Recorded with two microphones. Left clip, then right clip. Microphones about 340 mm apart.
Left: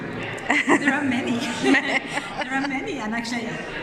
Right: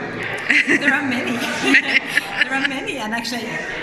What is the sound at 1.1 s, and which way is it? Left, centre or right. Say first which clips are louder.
Speech: right 3 dB; centre.